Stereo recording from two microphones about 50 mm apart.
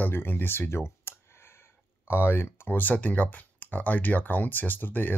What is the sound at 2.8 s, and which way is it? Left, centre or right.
Speech, left.